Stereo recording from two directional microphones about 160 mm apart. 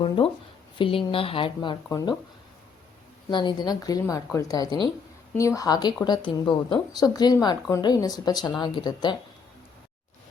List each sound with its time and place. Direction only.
0.2 s speech: 35° left (ahead or behind)
3.2 s speech: 30° left (ahead or behind)